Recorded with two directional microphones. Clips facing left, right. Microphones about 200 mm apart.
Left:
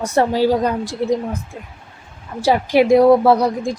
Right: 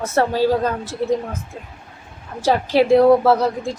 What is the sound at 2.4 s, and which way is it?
A woman's voice, 10° left (ahead or behind).